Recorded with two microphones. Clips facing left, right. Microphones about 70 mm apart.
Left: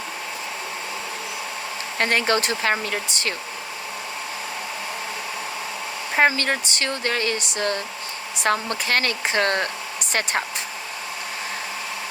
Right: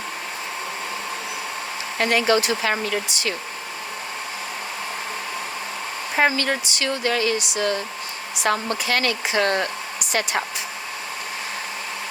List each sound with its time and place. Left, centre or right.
2.0 s speech: left
6.1 s speech: left